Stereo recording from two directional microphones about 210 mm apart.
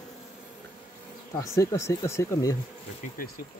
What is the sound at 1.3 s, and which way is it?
Speech, 15° left (ahead or behind).